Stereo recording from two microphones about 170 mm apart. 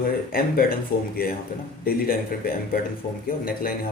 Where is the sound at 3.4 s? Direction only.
60° left (ahead or behind).